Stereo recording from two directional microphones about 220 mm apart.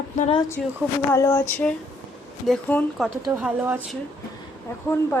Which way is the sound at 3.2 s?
10° right (ahead or behind).